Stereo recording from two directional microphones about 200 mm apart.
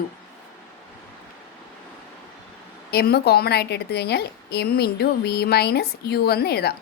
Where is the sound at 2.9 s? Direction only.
50° left (ahead or behind).